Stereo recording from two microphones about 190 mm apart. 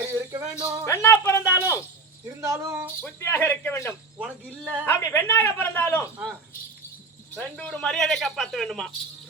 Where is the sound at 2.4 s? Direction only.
15° right (ahead or behind).